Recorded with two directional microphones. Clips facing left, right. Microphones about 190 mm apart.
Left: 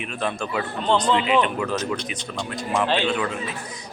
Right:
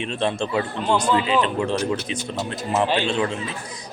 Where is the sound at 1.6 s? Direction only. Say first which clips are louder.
Right 3 dB; 30° right (ahead or behind).